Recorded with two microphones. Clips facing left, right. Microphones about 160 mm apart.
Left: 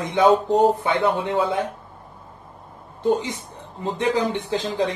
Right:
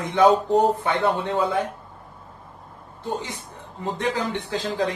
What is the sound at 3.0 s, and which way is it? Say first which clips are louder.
Speech: left 8 dB; 15° left (ahead or behind).